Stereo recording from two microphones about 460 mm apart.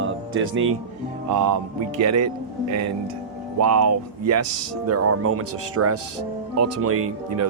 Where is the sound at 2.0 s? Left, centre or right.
Right.